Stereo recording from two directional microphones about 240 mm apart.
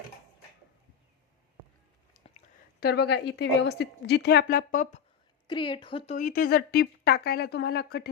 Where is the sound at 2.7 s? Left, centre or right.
Left.